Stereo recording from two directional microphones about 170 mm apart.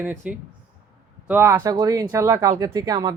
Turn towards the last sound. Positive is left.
turn(degrees=-20)  # may be behind; listen again after turning